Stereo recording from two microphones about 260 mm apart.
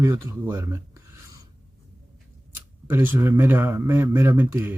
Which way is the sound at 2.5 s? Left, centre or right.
Centre.